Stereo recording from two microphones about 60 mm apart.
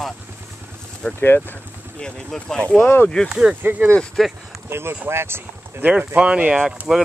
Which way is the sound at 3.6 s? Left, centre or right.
Right.